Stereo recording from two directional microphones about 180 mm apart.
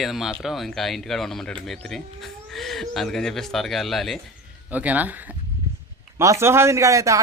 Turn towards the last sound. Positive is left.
turn(degrees=-15)  # may be behind; listen again after turning